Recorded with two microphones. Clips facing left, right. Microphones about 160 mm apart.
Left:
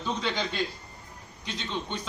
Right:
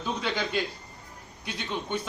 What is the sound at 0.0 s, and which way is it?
A man's voice, 10° right (ahead or behind).